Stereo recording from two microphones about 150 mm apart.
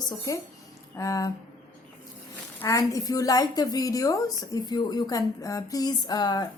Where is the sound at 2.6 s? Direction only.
20° left (ahead or behind).